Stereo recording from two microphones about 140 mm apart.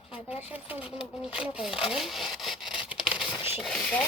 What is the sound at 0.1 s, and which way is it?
Speech, 45° left (ahead or behind).